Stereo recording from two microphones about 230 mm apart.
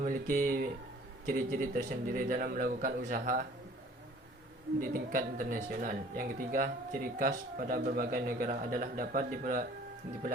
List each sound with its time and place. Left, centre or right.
0.0 s speech: right
4.8 s speech: right